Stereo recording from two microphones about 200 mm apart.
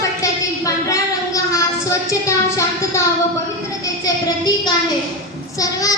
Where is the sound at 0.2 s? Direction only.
15° left (ahead or behind).